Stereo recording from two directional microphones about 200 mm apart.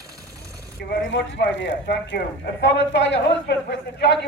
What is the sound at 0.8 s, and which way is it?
Speech, 60° left (ahead or behind).